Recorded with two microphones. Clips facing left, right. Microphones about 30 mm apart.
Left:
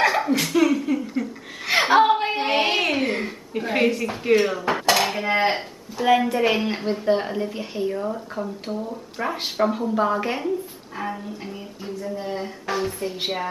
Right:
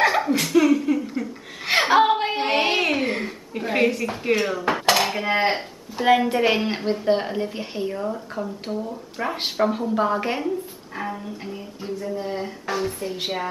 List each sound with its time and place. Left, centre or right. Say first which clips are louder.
0.0 s a sound: right 1 dB; centre
0.4 s chuckle: right 2 dB; centre
4.8 s dishes: even; centre
5.9 s a woman's voice: right 1 dB; right; by 10.5 s centre
11.0 s speech: even; centre